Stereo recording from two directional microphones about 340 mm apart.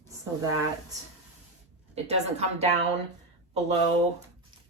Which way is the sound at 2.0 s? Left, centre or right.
Centre.